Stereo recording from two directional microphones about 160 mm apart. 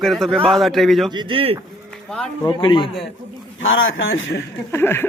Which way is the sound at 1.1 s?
30° right (ahead or behind).